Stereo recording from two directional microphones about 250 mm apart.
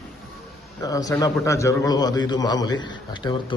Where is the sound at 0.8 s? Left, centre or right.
Centre.